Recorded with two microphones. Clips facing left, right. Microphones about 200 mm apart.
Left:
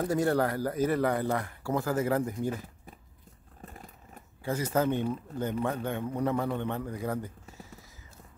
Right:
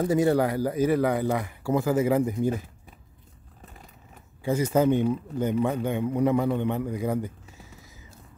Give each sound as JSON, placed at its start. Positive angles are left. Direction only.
{"t": 0.0, "sound": "a man's voice", "side_deg": -5}
{"t": 4.5, "sound": "a man's voice", "side_deg": -15}